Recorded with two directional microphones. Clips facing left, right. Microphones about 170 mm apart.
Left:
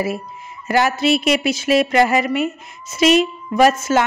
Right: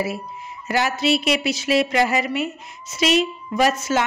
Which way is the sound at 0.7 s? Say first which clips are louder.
Left 4 dB; 50° left (ahead or behind).